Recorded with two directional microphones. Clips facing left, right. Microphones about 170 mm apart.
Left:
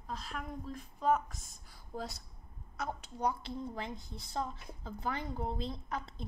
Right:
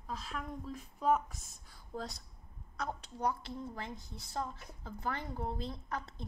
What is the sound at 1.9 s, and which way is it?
A woman's voice, 5° left (ahead or behind).